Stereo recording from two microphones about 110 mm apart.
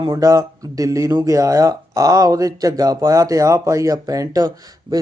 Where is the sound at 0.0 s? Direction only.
35° right (ahead or behind).